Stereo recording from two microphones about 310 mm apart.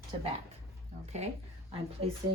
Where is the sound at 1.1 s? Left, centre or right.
Right.